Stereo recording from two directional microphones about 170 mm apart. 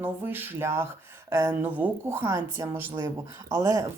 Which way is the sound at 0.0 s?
10° right (ahead or behind).